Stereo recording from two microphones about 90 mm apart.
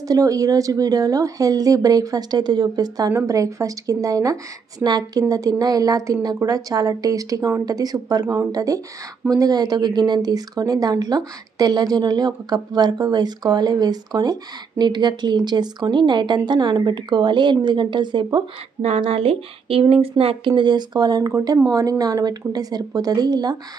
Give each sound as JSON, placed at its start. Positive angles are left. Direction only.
{"t": 0.1, "sound": "a woman's voice", "side_deg": -40}
{"t": 18.9, "sound": "speech", "side_deg": -90}